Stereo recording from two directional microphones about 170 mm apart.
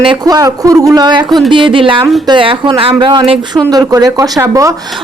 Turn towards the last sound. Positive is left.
turn(degrees=-20)  # may be behind; listen again after turning